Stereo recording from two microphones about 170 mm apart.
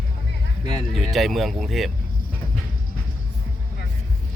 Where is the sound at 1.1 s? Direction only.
Centre (ahead or behind).